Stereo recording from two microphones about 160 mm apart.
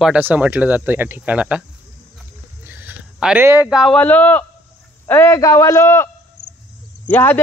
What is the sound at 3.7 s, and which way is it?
Speech, centre (ahead or behind).